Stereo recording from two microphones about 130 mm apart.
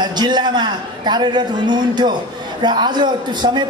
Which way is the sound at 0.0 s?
35° right (ahead or behind).